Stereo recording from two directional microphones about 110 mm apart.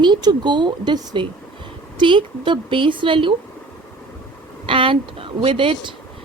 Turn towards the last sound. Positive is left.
turn(degrees=-50)  # may be behind; listen again after turning